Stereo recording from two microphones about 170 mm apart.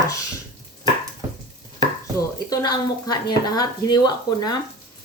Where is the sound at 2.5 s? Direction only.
20° left (ahead or behind).